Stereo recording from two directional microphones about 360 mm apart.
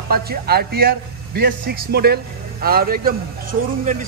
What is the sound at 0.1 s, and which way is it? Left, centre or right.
A man's voice, right.